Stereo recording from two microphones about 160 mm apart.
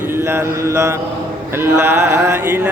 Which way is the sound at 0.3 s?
15° right (ahead or behind).